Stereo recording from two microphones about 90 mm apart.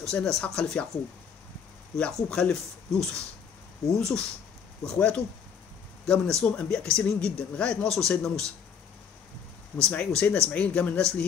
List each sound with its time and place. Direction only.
0.0 s speech: 5° left (ahead or behind)
2.0 s speech: 10° left (ahead or behind)
9.8 s speech: 10° left (ahead or behind)